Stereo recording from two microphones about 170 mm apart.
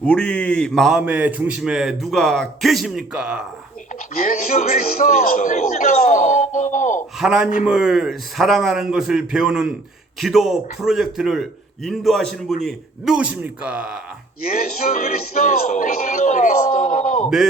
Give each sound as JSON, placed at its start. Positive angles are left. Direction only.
{"t": 0.0, "sound": "a man's voice", "side_deg": 5}
{"t": 4.2, "sound": "speech", "side_deg": 50}
{"t": 7.2, "sound": "a man's voice", "side_deg": -5}
{"t": 14.4, "sound": "speech", "side_deg": 55}
{"t": 17.2, "sound": "a man's voice", "side_deg": -5}